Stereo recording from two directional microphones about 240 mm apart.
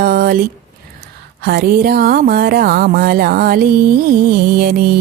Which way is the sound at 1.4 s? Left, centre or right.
Right.